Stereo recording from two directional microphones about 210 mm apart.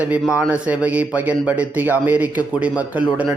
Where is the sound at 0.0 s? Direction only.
5° right (ahead or behind).